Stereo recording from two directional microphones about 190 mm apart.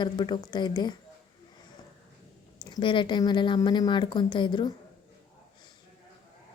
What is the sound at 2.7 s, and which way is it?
A woman's voice, 25° left (ahead or behind).